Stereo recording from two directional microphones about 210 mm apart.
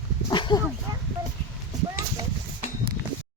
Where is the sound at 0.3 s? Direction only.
20° left (ahead or behind).